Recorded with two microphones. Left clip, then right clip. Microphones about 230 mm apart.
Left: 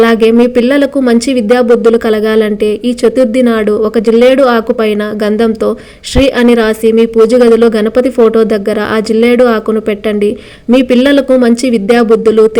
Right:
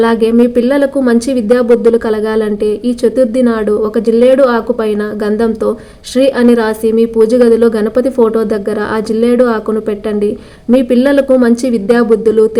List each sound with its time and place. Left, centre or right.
0.0 s speech: left
10.8 s speech: left